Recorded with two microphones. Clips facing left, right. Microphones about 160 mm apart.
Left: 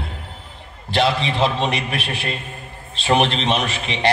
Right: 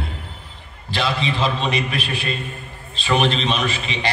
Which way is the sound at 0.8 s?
70° left (ahead or behind).